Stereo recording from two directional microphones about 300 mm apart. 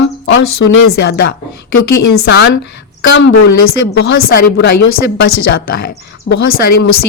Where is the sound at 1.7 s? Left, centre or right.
Left.